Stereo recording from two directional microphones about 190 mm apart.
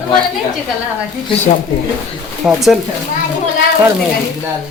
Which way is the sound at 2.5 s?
Centre (ahead or behind).